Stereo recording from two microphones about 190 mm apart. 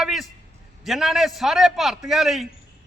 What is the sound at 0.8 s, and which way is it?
A man's voice, centre (ahead or behind).